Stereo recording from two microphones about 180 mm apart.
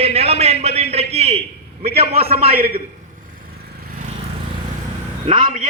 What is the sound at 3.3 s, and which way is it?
Vehicle, 55° right (ahead or behind).